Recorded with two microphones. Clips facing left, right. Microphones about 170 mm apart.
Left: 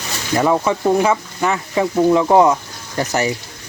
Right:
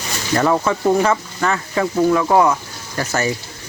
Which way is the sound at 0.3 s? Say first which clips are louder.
Left 1 dB; 10° left (ahead or behind).